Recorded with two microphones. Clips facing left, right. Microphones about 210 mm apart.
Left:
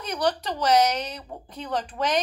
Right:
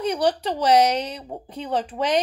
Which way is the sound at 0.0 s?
30° right (ahead or behind).